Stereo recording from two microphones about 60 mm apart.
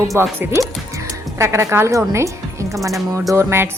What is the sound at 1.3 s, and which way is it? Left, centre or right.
Speech, right.